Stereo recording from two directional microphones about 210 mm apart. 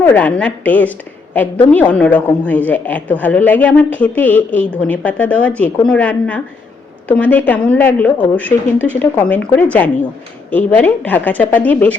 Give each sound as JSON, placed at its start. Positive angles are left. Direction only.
{"t": 0.0, "sound": "a woman's voice", "side_deg": 5}